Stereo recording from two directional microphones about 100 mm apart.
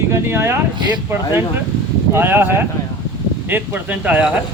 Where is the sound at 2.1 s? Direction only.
20° right (ahead or behind).